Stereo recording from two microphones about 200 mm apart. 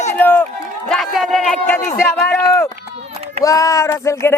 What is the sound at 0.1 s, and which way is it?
Run, 10° left (ahead or behind).